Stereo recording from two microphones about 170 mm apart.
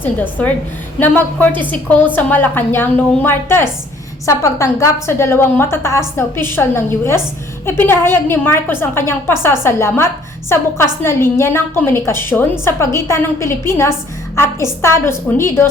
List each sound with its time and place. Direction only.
0.0 s a woman's voice: 10° left (ahead or behind)